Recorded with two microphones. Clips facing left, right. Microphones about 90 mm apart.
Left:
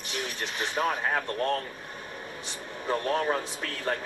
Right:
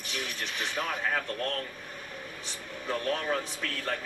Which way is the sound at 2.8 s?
25° left (ahead or behind).